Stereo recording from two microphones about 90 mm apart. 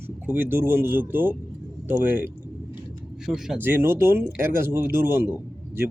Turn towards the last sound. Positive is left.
turn(degrees=-25)  # may be behind; listen again after turning